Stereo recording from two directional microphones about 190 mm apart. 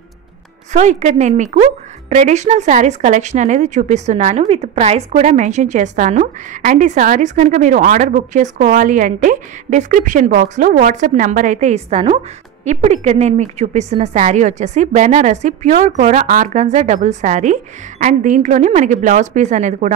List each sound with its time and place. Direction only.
0.7 s a woman's voice: 35° right (ahead or behind)